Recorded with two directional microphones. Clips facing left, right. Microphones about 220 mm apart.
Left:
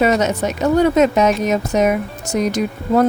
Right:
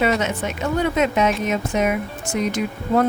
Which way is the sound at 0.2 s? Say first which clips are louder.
Left 6 dB; 40° left (ahead or behind).